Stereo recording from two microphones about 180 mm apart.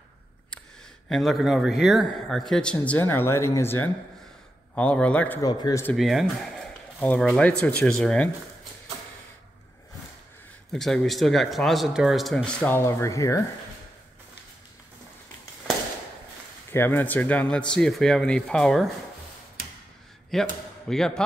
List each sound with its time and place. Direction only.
1.0 s a man's voice: centre (ahead or behind)
5.4 s a man's voice: 20° left (ahead or behind)
5.9 s a man's voice: centre (ahead or behind)
10.7 s a man's voice: centre (ahead or behind); by 13.4 s 15° left (ahead or behind)
16.7 s a man's voice: 10° left (ahead or behind)
20.3 s a man's voice: centre (ahead or behind)